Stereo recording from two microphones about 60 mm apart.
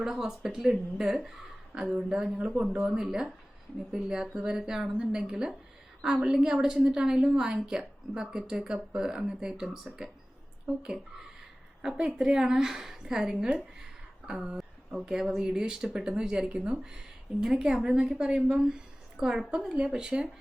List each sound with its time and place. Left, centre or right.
0.0 s a woman's voice: centre
11.8 s a woman's voice: centre